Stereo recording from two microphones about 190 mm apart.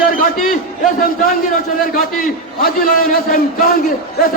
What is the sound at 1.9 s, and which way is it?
A man's voice, 50° left (ahead or behind).